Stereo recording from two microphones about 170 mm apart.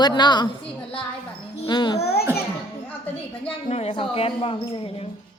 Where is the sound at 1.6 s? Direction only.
25° left (ahead or behind).